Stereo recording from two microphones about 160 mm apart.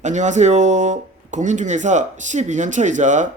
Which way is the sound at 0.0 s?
50° right (ahead or behind).